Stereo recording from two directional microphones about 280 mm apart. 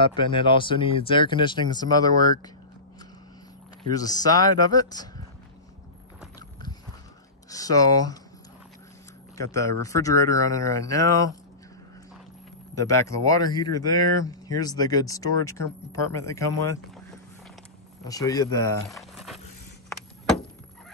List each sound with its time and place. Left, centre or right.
0.0 s speech: centre
3.9 s speech: centre
7.4 s speech: centre
9.4 s speech: centre
12.7 s speech: centre
18.0 s speech: centre
18.9 s a sound: centre
19.9 s vehicle: centre